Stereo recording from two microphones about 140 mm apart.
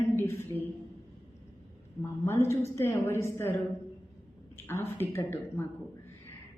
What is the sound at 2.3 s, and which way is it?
A woman's voice, 20° left (ahead or behind).